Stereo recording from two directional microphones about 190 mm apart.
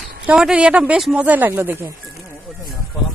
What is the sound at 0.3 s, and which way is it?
Speech, 5° right (ahead or behind).